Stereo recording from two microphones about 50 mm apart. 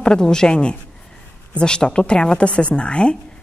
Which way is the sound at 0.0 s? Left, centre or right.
Centre.